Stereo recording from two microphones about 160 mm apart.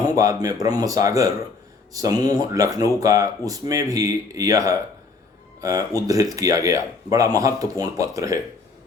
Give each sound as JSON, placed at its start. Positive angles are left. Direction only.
{"t": 0.2, "sound": "speech", "side_deg": -20}